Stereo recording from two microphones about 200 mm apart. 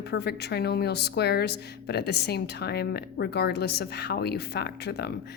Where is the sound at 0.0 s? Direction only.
55° left (ahead or behind).